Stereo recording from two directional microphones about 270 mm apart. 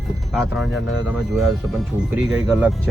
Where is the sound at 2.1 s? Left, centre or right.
Centre.